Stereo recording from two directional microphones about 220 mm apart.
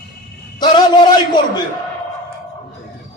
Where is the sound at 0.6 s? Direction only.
20° left (ahead or behind).